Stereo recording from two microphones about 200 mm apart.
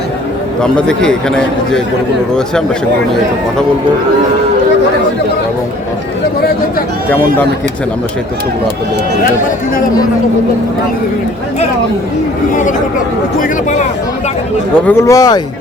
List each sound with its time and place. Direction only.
0.6 s a man's voice: 5° left (ahead or behind)
7.1 s speech: 10° left (ahead or behind)
13.4 s speech: 35° left (ahead or behind)
14.8 s speech: 15° left (ahead or behind)